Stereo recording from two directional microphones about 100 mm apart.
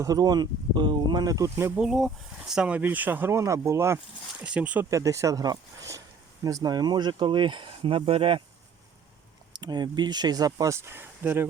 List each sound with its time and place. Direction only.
0.0 s speech: 40° right (ahead or behind)
1.5 s speech: 25° right (ahead or behind)
1.8 s speech: 5° right (ahead or behind); by 3.9 s 25° right (ahead or behind)
3.9 s speech: 10° right (ahead or behind)
4.9 s speech: 35° right (ahead or behind); by 8.4 s 70° right (ahead or behind)
9.5 s speech: 45° right (ahead or behind); by 11.4 s 20° right (ahead or behind)